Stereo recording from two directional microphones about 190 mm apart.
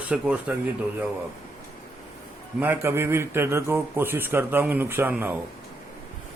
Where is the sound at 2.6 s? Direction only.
10° right (ahead or behind).